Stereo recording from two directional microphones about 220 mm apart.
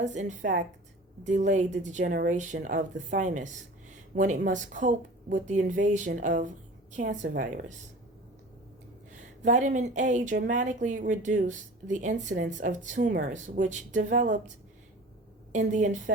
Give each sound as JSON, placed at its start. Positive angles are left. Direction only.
{"t": 0.0, "sound": "speech", "side_deg": -35}
{"t": 9.4, "sound": "speech", "side_deg": -35}
{"t": 15.5, "sound": "speech", "side_deg": -35}